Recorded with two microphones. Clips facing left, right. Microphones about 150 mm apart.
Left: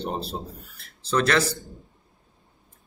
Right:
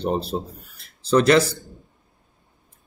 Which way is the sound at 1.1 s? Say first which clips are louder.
Right 6 dB; 15° right (ahead or behind).